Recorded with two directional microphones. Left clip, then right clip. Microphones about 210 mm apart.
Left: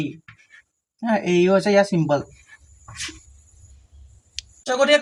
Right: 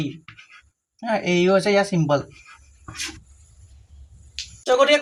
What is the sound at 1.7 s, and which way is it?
Speech, 30° right (ahead or behind).